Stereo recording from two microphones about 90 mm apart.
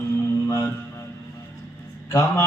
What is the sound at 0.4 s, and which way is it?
Music, 35° left (ahead or behind).